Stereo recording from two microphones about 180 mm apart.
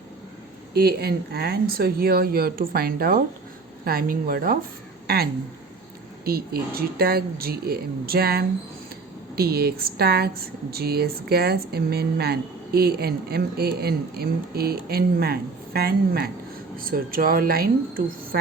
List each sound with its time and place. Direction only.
0.7 s speech: 60° right (ahead or behind)